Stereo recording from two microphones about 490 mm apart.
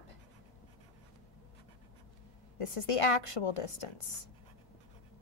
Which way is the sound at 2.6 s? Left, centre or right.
Left.